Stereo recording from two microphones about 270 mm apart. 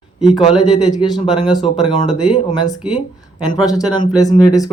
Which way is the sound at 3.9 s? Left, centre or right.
Centre.